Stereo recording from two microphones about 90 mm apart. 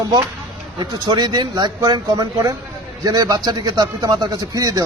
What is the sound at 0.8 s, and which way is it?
A man's voice, 55° right (ahead or behind).